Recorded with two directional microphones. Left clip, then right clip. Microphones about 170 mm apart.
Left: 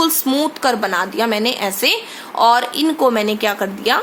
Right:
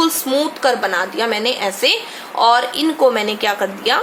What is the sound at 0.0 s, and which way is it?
A woman's voice, 40° left (ahead or behind).